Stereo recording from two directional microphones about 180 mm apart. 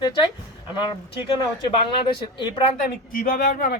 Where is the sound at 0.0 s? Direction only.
25° left (ahead or behind).